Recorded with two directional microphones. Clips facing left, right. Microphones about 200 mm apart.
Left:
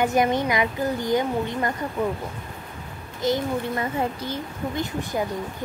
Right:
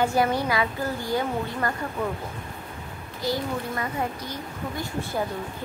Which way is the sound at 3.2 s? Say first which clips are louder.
Left 4 dB; 25° left (ahead or behind).